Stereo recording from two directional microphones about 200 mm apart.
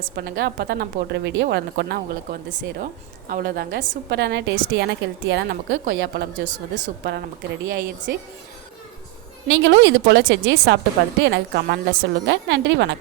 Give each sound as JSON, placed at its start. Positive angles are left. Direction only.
{"t": 0.0, "sound": "a woman's voice", "side_deg": -50}
{"t": 2.8, "sound": "a woman's voice", "side_deg": -45}
{"t": 4.2, "sound": "a woman's voice", "side_deg": -55}
{"t": 9.5, "sound": "a woman's voice", "side_deg": -65}